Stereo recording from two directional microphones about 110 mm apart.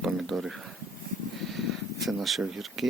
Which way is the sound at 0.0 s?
Centre (ahead or behind).